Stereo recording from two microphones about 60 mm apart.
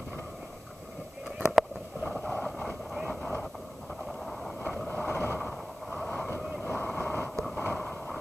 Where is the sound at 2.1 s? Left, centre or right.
Centre.